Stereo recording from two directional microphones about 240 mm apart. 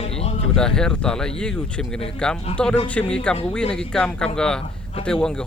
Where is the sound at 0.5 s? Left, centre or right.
Centre.